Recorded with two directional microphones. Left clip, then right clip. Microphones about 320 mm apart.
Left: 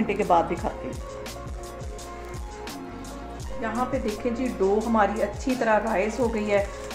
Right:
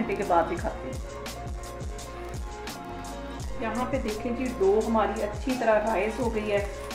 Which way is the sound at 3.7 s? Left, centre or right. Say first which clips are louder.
Left 3 dB; centre.